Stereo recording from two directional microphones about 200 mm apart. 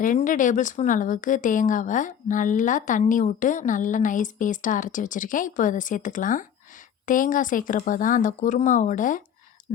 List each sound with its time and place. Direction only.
0.0 s a woman's voice: 40° left (ahead or behind)